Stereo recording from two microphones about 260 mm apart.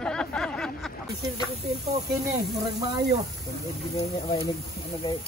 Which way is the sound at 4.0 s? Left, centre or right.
Left.